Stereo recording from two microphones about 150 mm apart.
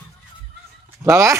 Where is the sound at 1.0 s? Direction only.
20° right (ahead or behind).